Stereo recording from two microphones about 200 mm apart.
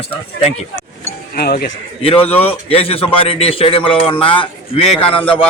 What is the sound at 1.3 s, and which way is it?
Speech, 50° left (ahead or behind).